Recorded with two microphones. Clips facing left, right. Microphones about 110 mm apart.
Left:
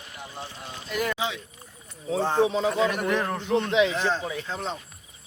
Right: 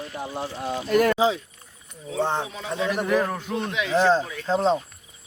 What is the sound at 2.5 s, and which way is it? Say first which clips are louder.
Speech: left 5 dB; 25° left (ahead or behind).